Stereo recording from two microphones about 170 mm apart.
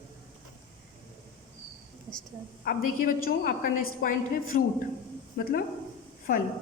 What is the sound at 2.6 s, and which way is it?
A woman's voice, 55° left (ahead or behind).